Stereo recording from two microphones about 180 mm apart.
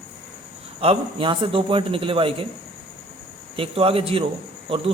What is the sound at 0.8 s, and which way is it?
A man's voice, 30° right (ahead or behind).